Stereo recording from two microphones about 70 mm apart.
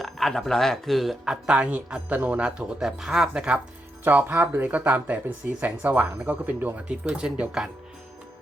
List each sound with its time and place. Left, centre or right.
0.0 s speech: centre
1.2 s speech: centre; by 2.4 s right
2.4 s speech: centre
4.0 s speech: right